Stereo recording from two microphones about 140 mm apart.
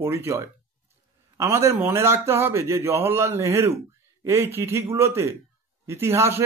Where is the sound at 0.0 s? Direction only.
20° right (ahead or behind).